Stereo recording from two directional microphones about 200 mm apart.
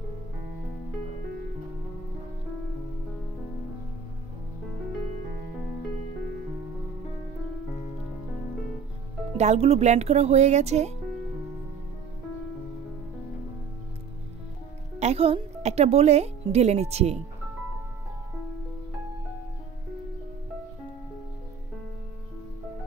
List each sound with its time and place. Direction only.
9.4 s speech: 30° right (ahead or behind)
15.0 s speech: 30° right (ahead or behind)